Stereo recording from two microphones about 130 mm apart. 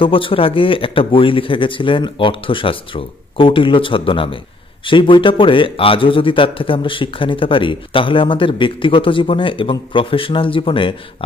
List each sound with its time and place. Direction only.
0.0 s a man's voice: 40° left (ahead or behind)